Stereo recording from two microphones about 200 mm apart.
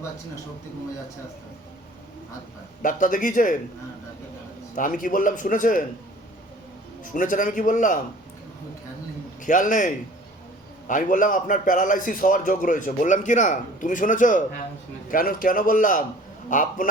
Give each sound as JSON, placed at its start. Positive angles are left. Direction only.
{"t": 2.8, "sound": "a man's voice", "side_deg": 40}
{"t": 4.7, "sound": "a man's voice", "side_deg": 40}
{"t": 7.0, "sound": "a man's voice", "side_deg": 40}
{"t": 9.4, "sound": "a man's voice", "side_deg": 40}